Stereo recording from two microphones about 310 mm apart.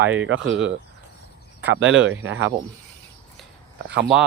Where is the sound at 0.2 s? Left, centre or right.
Right.